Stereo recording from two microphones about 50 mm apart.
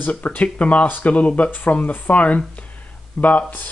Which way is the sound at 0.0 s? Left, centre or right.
Left.